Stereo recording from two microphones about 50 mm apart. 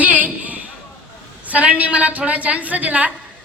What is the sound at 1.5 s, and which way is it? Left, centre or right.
A woman's voice, right.